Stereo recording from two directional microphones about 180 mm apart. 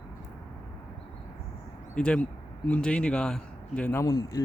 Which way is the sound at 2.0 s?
5° left (ahead or behind).